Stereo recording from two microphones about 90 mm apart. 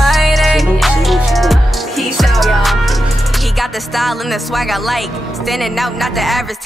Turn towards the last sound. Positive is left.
turn(degrees=0)  # may be behind; listen again after turning